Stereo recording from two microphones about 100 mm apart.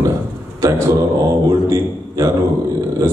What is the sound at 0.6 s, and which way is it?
A man's voice, 30° right (ahead or behind).